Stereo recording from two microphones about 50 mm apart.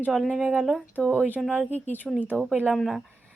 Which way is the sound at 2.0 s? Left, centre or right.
Centre.